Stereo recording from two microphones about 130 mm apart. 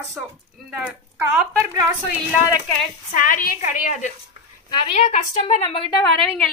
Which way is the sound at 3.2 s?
90° left.